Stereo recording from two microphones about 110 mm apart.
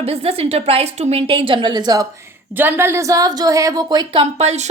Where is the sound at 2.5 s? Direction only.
15° right (ahead or behind); by 4.2 s 40° right (ahead or behind).